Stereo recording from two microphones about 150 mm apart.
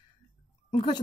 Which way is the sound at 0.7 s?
30° left (ahead or behind).